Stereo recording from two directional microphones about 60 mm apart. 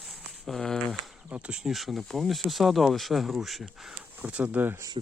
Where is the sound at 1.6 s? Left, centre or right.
Centre.